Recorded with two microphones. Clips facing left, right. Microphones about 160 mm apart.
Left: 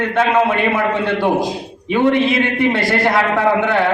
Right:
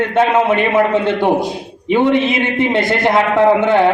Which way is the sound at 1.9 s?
20° right (ahead or behind).